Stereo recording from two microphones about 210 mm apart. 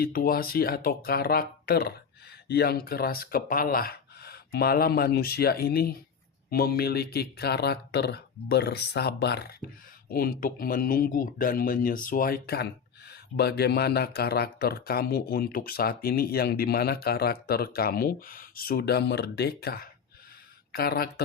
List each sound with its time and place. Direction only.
0.0 s speech: 45° left (ahead or behind)